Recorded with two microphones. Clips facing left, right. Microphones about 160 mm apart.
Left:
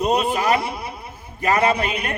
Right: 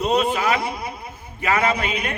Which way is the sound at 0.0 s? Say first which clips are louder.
Even; 10° left (ahead or behind).